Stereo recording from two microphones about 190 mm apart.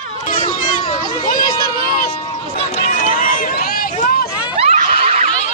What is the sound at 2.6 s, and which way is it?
Run, 35° left (ahead or behind).